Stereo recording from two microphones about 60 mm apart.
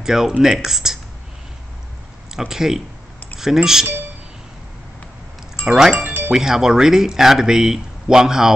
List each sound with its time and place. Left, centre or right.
0.0 s speech: centre
2.3 s speech: centre
5.6 s speech: centre
5.9 s music: right
6.3 s speech: centre